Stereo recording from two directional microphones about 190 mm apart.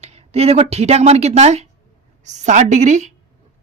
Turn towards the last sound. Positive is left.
turn(degrees=-40)  # may be behind; listen again after turning